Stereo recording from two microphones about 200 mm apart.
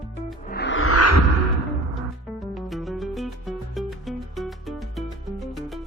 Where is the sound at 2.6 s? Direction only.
Centre (ahead or behind).